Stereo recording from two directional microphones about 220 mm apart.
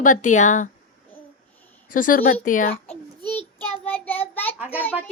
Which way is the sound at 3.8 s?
10° left (ahead or behind).